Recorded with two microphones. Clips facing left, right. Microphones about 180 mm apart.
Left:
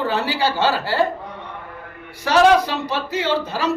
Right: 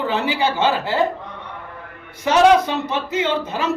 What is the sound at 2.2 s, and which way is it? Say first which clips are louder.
Speech: right 1 dB; 20° right (ahead or behind).